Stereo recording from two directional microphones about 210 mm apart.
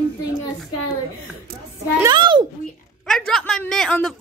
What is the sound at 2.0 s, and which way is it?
Speech, 25° right (ahead or behind).